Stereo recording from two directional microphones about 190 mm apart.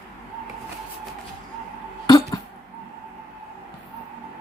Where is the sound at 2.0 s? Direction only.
20° left (ahead or behind).